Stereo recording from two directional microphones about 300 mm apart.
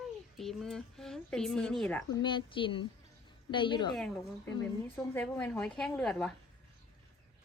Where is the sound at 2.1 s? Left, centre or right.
Centre.